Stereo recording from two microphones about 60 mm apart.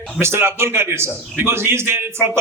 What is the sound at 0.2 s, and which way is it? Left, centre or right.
A man's voice, right.